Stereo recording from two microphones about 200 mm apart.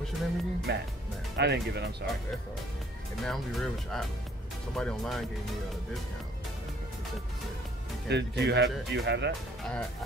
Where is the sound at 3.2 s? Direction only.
Centre (ahead or behind).